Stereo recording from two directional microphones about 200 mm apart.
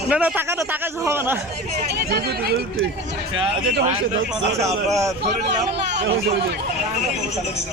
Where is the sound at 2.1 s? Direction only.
50° right (ahead or behind).